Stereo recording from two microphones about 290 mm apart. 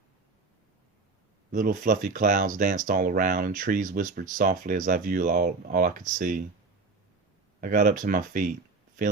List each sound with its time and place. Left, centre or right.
1.5 s speech: right
7.6 s speech: right